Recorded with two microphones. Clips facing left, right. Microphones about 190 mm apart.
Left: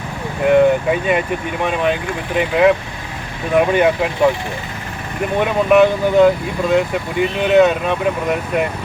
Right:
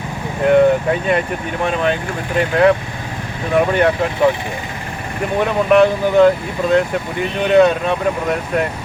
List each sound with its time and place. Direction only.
0.4 s speech: 5° left (ahead or behind)
5.4 s speech: 5° left (ahead or behind)